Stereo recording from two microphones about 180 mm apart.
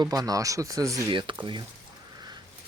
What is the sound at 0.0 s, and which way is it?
Speech, 20° right (ahead or behind).